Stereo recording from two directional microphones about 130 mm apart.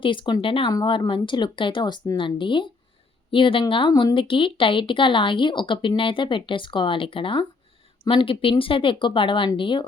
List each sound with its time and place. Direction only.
0.0 s speech: 40° left (ahead or behind)
0.7 s speech: 35° left (ahead or behind)